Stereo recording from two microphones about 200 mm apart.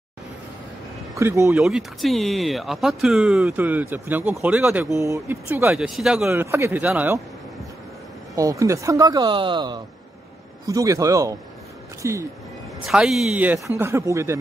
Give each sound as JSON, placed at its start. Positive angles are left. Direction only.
{"t": 1.1, "sound": "speech", "side_deg": -15}
{"t": 1.6, "sound": "speech", "side_deg": 0}
{"t": 6.2, "sound": "speech", "side_deg": -15}
{"t": 8.4, "sound": "speech", "side_deg": -15}
{"t": 12.8, "sound": "speech", "side_deg": -5}